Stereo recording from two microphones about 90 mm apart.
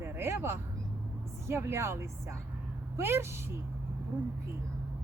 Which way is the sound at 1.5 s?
30° right (ahead or behind).